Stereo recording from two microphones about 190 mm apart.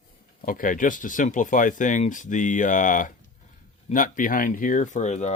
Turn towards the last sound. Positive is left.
turn(degrees=40)  # may be behind; listen again after turning